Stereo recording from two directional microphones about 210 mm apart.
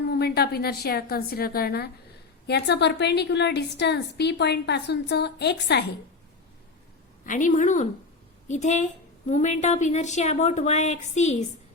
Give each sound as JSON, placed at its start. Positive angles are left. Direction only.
{"t": 0.1, "sound": "a woman's voice", "side_deg": 50}
{"t": 7.3, "sound": "speech", "side_deg": 35}